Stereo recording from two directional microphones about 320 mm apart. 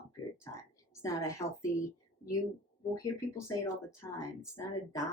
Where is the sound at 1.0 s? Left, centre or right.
Centre.